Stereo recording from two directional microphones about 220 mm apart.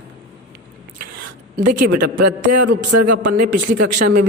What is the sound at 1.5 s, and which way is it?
Speech, 35° right (ahead or behind).